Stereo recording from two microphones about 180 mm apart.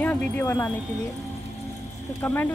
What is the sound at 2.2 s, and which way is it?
Speech, 10° left (ahead or behind).